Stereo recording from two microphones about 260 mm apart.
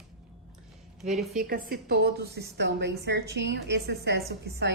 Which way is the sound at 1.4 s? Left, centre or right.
Right.